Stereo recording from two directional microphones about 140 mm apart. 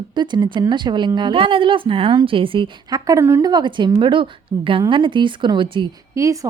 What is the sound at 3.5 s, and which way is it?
Speech, 35° right (ahead or behind).